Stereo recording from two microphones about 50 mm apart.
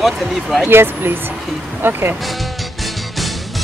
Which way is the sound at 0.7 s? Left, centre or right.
Right.